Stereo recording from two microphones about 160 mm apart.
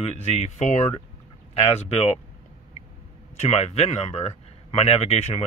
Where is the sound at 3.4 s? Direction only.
40° left (ahead or behind).